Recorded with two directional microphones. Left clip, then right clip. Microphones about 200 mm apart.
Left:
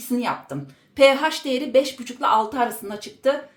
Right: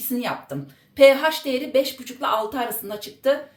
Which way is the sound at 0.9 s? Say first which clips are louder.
Right 2 dB; 45° left (ahead or behind).